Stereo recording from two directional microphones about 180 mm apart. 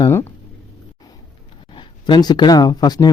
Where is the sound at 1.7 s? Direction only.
25° left (ahead or behind).